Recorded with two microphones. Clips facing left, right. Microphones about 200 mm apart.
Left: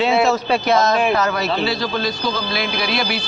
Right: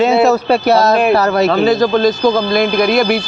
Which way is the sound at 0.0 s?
40° right (ahead or behind).